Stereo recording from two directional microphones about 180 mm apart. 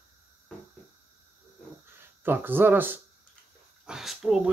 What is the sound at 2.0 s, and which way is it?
Speech, 10° right (ahead or behind).